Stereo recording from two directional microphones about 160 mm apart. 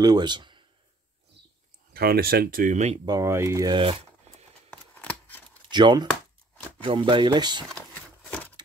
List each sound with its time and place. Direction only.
0.0 s speech: 25° right (ahead or behind)
2.0 s speech: 70° right (ahead or behind); by 3.0 s 50° right (ahead or behind)
3.1 s speech: 20° right (ahead or behind)
4.6 s a sound: 10° left (ahead or behind)
5.7 s speech: 25° right (ahead or behind)
7.9 s a sound: 10° left (ahead or behind)